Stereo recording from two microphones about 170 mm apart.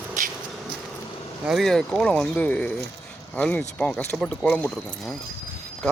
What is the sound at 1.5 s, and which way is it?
Speech, centre (ahead or behind).